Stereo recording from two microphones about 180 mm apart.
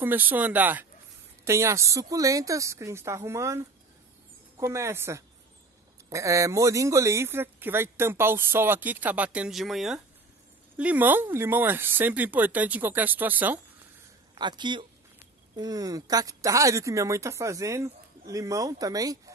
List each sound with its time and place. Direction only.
0.0 s speech: 10° right (ahead or behind)
14.3 s a man's voice: 25° right (ahead or behind)